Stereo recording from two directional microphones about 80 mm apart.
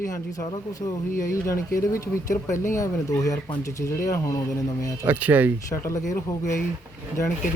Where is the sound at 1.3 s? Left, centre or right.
Left.